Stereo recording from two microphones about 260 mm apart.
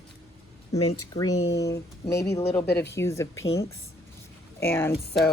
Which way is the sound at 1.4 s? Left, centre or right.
Left.